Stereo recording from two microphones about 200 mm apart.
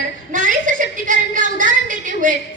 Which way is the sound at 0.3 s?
40° right (ahead or behind).